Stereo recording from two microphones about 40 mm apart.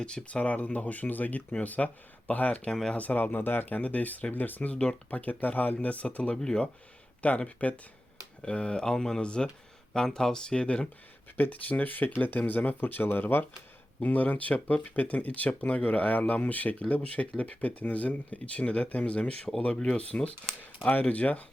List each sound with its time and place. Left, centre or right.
0.0 s speech: left
3.3 s speech: left
3.8 s speech: left
4.7 s speech: left
5.1 s speech: left
6.3 s speech: centre
7.2 s speech: left
11.3 s speech: left
14.0 s speech: left